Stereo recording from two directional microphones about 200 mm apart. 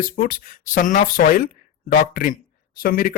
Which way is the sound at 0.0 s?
45° left (ahead or behind).